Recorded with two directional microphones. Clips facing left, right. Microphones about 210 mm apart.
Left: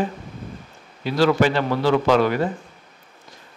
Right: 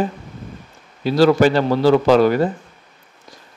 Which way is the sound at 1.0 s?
35° right (ahead or behind).